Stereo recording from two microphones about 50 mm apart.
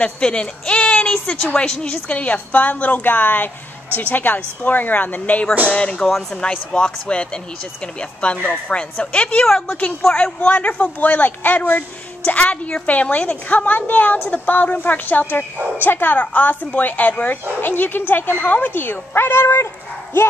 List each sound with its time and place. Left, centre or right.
0.0 s a woman's voice: centre
5.7 s speech: left
10.1 s a woman's voice: left
12.3 s a woman's voice: left